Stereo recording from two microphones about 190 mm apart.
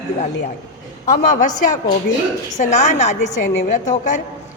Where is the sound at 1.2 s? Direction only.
40° left (ahead or behind).